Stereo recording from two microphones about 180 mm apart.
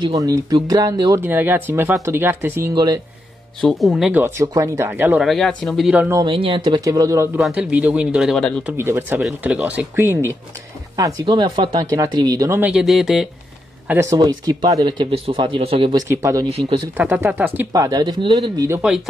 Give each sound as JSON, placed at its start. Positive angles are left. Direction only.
{"t": 0.0, "sound": "speech", "side_deg": -20}
{"t": 3.6, "sound": "speech", "side_deg": 0}
{"t": 6.0, "sound": "speech", "side_deg": -20}
{"t": 6.3, "sound": "speech", "side_deg": -30}
{"t": 7.3, "sound": "speech", "side_deg": -5}
{"t": 8.6, "sound": "speech", "side_deg": -15}
{"t": 11.2, "sound": "speech", "side_deg": -25}
{"t": 13.8, "sound": "speech", "side_deg": -15}
{"t": 16.5, "sound": "speech", "side_deg": -35}
{"t": 16.9, "sound": "speech", "side_deg": -10}
{"t": 17.8, "sound": "speech", "side_deg": -25}